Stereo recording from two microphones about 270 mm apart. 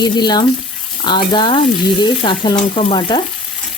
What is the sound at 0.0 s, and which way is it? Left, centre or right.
Speech, centre.